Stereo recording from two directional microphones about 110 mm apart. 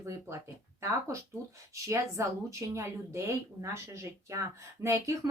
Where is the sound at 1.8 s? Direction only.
25° right (ahead or behind).